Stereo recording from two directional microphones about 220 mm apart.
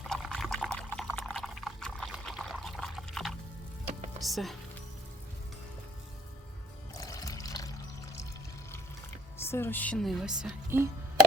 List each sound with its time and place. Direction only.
0.0 s pour: centre (ahead or behind)
4.2 s music: centre (ahead or behind)
6.9 s music: 15° left (ahead or behind)
9.4 s speech: 10° left (ahead or behind); by 10.8 s 5° right (ahead or behind)